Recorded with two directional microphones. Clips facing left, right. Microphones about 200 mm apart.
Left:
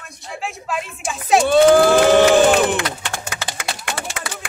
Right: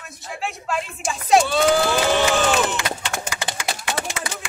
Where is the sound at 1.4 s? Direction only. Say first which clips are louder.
Left 7 dB; 50° left (ahead or behind).